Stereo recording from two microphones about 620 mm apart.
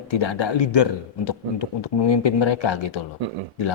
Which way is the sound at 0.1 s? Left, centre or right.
Left.